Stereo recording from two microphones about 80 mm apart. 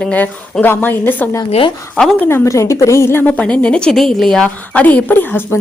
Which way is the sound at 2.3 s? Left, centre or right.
Left.